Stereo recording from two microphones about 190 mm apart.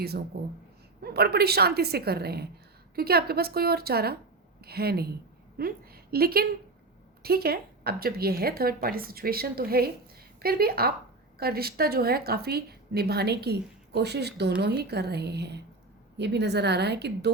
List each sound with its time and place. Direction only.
0.3 s a woman's voice: 55° right (ahead or behind)